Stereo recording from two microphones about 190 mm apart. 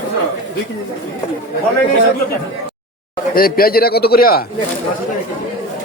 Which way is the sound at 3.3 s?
50° left (ahead or behind).